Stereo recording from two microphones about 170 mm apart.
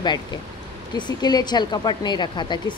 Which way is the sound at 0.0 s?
25° left (ahead or behind).